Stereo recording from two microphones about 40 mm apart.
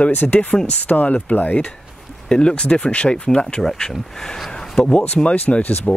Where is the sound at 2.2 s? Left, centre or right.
Left.